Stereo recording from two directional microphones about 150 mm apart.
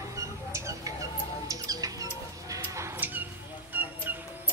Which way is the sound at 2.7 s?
20° right (ahead or behind).